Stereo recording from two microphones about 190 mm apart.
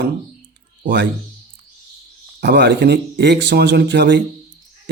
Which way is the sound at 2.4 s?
60° right (ahead or behind).